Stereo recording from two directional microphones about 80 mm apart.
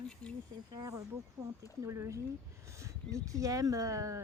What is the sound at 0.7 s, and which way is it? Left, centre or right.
Speech, right.